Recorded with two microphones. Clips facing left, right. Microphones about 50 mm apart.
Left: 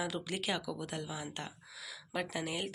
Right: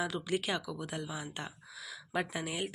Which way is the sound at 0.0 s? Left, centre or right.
Centre.